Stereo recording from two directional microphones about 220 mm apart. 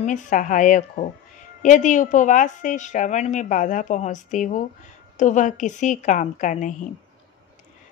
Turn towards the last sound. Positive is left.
turn(degrees=35)  # may be behind; listen again after turning